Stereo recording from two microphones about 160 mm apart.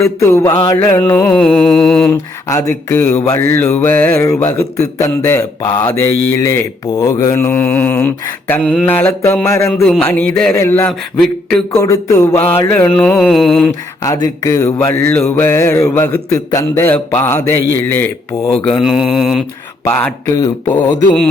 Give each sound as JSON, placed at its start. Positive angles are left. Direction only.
{"t": 0.0, "sound": "a sound", "side_deg": 20}
{"t": 0.7, "sound": "speech", "side_deg": 20}
{"t": 2.0, "sound": "speech", "side_deg": 15}
{"t": 10.5, "sound": "a sound", "side_deg": 20}
{"t": 12.5, "sound": "speech", "side_deg": 15}
{"t": 13.0, "sound": "mantra", "side_deg": 5}
{"t": 14.0, "sound": "speech", "side_deg": 20}
{"t": 18.6, "sound": "mantra", "side_deg": 0}
{"t": 19.8, "sound": "speech", "side_deg": 10}